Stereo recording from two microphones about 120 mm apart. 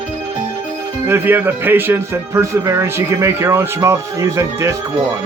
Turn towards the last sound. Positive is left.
turn(degrees=-25)  # may be behind; listen again after turning